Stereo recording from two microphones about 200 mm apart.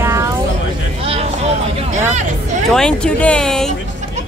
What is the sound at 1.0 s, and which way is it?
Speech, 30° right (ahead or behind).